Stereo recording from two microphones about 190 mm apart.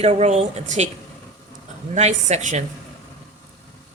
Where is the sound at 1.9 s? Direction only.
35° right (ahead or behind).